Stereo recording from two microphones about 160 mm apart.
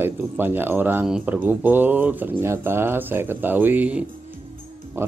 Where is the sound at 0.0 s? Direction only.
15° right (ahead or behind).